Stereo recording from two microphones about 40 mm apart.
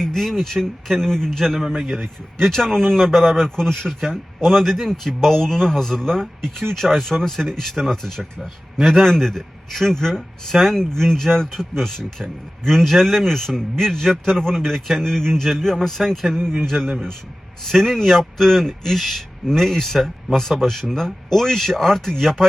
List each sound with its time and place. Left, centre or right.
0.0 s speech: centre
1.7 s a man's voice: centre